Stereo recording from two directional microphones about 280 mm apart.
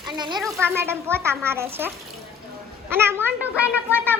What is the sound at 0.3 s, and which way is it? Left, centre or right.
Speech, centre.